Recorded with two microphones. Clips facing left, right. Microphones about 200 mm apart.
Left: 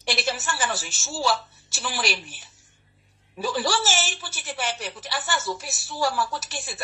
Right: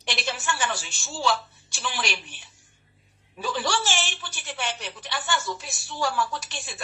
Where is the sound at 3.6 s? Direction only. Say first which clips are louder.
Even; 40° left (ahead or behind).